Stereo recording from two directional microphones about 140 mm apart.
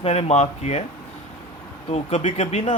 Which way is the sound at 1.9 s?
55° left (ahead or behind).